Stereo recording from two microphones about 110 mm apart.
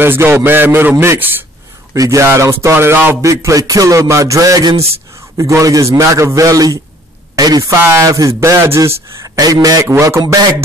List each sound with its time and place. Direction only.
0.0 s a man's voice: 20° right (ahead or behind)
7.7 s a man's voice: 25° right (ahead or behind)